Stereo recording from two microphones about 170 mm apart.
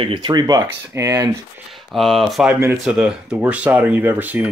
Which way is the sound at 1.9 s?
Centre (ahead or behind).